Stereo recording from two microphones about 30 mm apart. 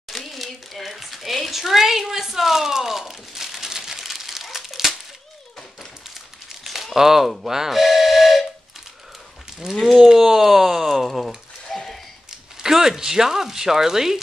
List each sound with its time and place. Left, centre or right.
0.1 s a sound: centre
1.5 s speech: centre
2.8 s crumpling: centre
6.6 s crumpling: centre
7.0 s speech: centre
7.8 s steam whistle: centre
9.6 s speech: centre
11.1 s a sound: centre
12.3 s speech: centre